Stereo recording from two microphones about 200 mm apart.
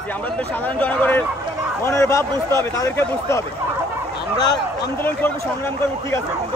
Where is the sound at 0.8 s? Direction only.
5° left (ahead or behind).